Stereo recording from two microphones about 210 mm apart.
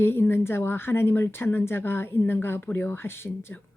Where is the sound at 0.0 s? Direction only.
10° left (ahead or behind).